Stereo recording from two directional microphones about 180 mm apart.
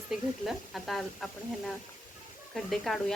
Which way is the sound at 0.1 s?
Centre (ahead or behind).